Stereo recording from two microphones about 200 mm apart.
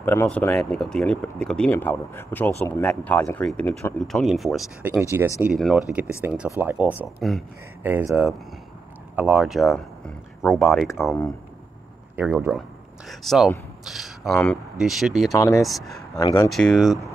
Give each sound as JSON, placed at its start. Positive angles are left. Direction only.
{"t": 0.0, "sound": "speech", "side_deg": 10}
{"t": 7.8, "sound": "speech", "side_deg": -10}
{"t": 10.9, "sound": "speech", "side_deg": 10}
{"t": 12.2, "sound": "speech", "side_deg": -5}
{"t": 15.3, "sound": "speech", "side_deg": 15}
{"t": 15.6, "sound": "speech", "side_deg": 0}
{"t": 16.2, "sound": "speech", "side_deg": 20}
{"t": 16.4, "sound": "speech", "side_deg": 0}